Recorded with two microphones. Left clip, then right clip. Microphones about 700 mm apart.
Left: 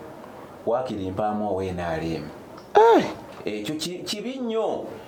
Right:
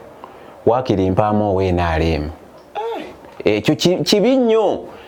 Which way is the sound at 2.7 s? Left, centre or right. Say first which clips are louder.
Left 9 dB; left.